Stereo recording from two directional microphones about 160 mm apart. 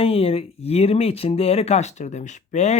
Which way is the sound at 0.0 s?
40° left (ahead or behind).